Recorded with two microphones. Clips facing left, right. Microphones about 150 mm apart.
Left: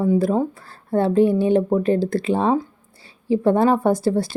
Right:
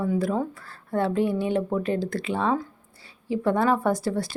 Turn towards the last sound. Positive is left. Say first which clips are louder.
# left 6 dB
turn(degrees=30)  # may be behind; listen again after turning